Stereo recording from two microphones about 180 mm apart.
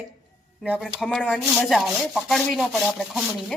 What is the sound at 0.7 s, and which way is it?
Speech, 5° left (ahead or behind).